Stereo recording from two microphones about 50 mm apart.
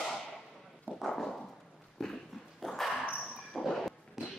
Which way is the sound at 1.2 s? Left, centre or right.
Centre.